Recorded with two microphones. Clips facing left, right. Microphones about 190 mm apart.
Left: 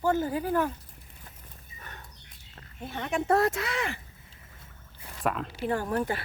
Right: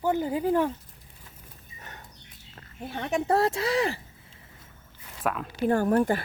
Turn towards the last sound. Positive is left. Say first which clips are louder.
# right 6 dB
turn(degrees=-45)  # may be behind; listen again after turning